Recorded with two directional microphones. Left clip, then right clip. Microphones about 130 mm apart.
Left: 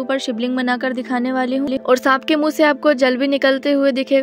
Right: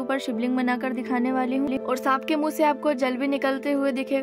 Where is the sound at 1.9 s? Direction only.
35° left (ahead or behind).